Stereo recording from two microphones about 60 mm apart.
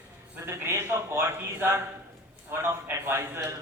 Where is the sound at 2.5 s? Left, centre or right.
Right.